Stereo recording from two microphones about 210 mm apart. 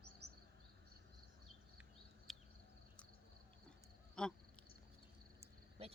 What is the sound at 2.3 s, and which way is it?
Cricket, centre (ahead or behind).